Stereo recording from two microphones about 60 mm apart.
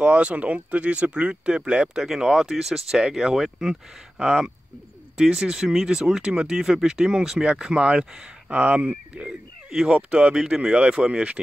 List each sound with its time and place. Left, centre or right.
0.0 s speech: right
2.0 s speech: centre
9.7 s speech: centre